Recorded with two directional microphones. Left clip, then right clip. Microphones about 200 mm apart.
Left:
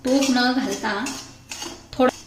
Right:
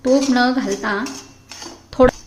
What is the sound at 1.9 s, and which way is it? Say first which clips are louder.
Dishes: right 7 dB; 30° right (ahead or behind).